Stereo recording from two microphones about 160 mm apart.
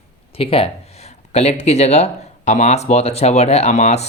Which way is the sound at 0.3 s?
35° left (ahead or behind).